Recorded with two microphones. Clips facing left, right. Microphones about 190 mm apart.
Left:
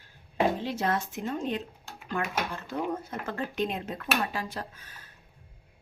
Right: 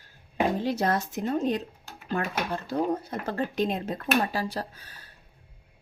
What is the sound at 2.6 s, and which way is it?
Speech, 35° right (ahead or behind).